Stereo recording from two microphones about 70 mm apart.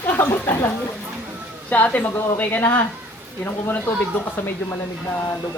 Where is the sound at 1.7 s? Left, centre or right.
Left.